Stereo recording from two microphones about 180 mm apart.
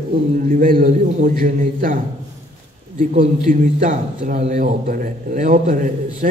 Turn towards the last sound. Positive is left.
turn(degrees=-50)  # may be behind; listen again after turning